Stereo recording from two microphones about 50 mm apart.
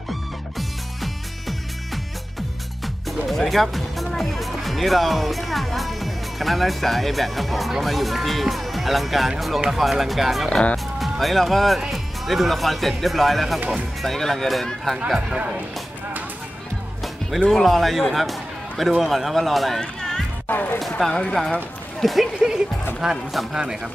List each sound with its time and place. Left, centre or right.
0.1 s music: centre
3.3 s speech: centre
15.0 s speech: centre
17.5 s speech: centre
19.8 s music: centre
20.4 s speech: left
21.3 s speech: centre